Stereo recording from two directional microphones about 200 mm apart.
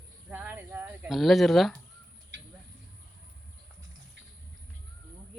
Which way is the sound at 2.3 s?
60° right (ahead or behind).